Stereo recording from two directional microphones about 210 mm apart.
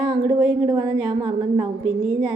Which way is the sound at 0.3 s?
10° right (ahead or behind).